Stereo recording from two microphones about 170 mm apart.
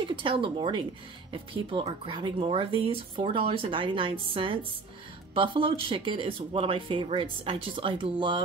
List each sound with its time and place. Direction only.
0.0 s speech: 30° right (ahead or behind)